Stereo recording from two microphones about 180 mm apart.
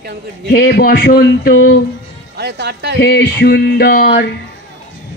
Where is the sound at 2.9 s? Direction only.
65° left (ahead or behind).